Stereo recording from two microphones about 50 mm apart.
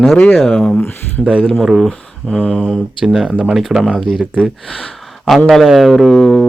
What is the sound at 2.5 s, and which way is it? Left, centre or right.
Speech, centre.